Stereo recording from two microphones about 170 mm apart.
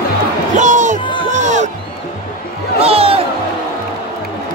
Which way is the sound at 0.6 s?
45° right (ahead or behind).